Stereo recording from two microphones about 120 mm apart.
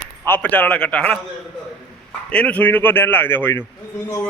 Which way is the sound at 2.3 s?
10° left (ahead or behind).